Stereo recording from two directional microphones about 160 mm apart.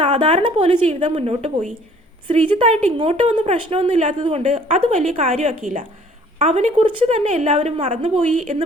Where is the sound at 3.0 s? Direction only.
35° right (ahead or behind).